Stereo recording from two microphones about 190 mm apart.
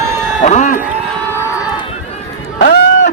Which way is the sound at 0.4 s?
40° left (ahead or behind).